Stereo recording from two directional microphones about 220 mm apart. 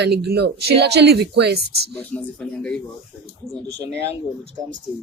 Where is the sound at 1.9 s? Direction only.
5° left (ahead or behind).